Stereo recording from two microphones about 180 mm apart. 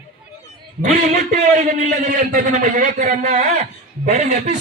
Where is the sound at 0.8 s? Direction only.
45° right (ahead or behind).